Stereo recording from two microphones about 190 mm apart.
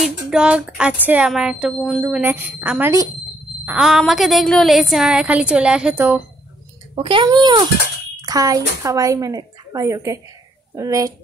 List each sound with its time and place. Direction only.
0.3 s a woman's voice: 5° right (ahead or behind)
7.0 s speech: 25° right (ahead or behind)